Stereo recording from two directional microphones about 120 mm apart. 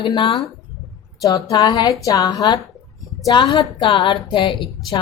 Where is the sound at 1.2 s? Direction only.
30° left (ahead or behind).